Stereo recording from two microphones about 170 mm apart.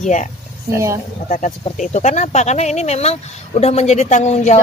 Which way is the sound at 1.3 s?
45° left (ahead or behind).